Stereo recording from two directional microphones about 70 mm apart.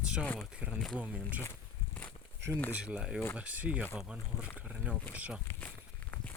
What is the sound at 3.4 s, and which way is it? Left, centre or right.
Speech, centre.